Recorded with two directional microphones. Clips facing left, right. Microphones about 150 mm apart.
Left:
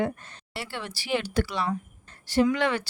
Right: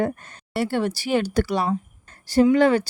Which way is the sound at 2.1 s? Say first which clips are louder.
Right 5 dB; 40° right (ahead or behind).